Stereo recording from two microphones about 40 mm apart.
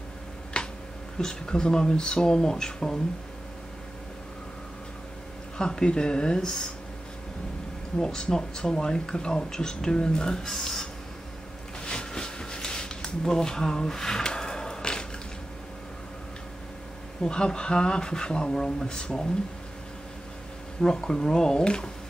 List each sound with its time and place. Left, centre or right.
0.5 s a sound: left
1.1 s speech: centre
5.6 s speech: centre
8.0 s speech: centre
11.8 s a sound: left
17.2 s speech: centre
20.8 s speech: centre